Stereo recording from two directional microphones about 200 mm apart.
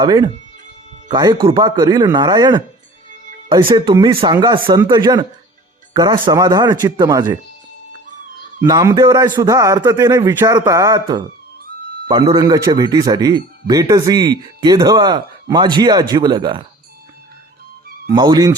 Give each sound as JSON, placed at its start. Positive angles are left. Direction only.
{"t": 0.0, "sound": "speech", "side_deg": -20}
{"t": 8.6, "sound": "a man's voice", "side_deg": -15}
{"t": 18.1, "sound": "speech", "side_deg": -20}